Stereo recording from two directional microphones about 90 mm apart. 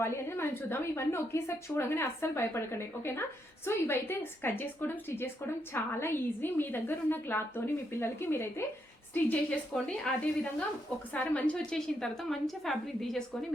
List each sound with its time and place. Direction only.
0.0 s a woman's voice: 30° left (ahead or behind)
9.7 s a woman's voice: 10° left (ahead or behind)